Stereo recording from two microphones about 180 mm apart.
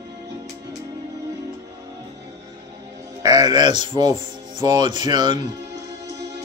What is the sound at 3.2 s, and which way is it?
Speech, 20° right (ahead or behind).